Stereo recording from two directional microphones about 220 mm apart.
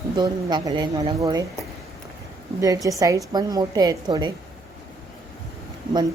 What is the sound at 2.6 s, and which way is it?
A woman's voice, 15° right (ahead or behind).